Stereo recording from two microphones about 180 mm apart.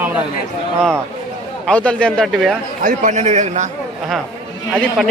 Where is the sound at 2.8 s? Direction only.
45° right (ahead or behind).